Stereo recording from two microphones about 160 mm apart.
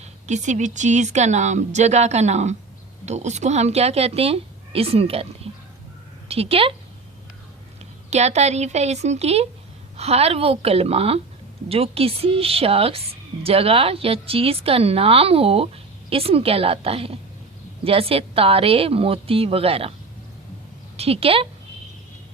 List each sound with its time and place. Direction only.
0.0 s a woman's voice: 45° right (ahead or behind)
8.1 s a woman's voice: 45° right (ahead or behind)
20.9 s a woman's voice: 40° right (ahead or behind)